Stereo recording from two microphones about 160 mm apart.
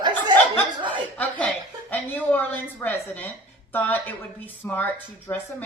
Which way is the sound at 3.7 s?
10° left (ahead or behind).